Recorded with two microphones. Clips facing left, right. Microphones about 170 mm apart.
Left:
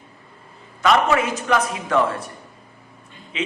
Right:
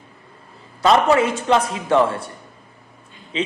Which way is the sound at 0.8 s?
30° right (ahead or behind).